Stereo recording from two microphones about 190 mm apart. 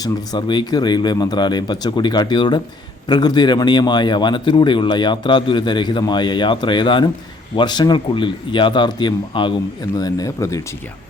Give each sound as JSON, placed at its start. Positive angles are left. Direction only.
{"t": 0.0, "sound": "a man's voice", "side_deg": 20}